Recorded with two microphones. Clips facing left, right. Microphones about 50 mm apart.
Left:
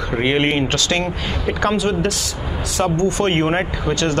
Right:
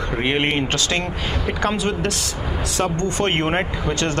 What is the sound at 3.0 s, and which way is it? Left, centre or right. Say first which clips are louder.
Speech: left 3 dB; right.